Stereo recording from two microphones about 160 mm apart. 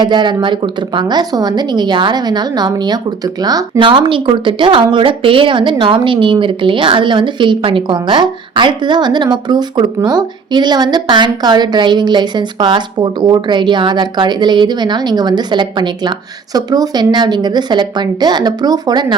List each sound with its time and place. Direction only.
0.0 s speech: 30° right (ahead or behind)